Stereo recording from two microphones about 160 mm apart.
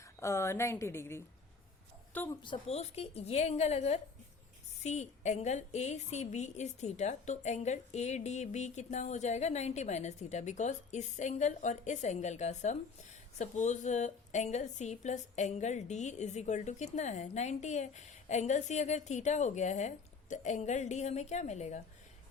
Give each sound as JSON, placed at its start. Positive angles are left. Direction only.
{"t": 0.0, "sound": "a woman's voice", "side_deg": 15}
{"t": 2.4, "sound": "a woman's voice", "side_deg": 35}